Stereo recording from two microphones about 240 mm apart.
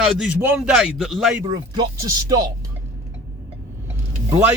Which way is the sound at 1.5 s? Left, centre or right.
Centre.